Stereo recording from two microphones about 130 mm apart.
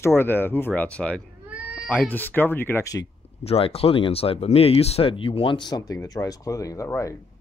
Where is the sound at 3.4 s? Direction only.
50° left (ahead or behind); by 7.2 s 25° left (ahead or behind).